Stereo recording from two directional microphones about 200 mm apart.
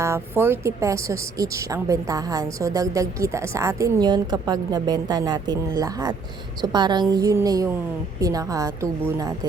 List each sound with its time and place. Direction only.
0.0 s a woman's voice: 10° right (ahead or behind)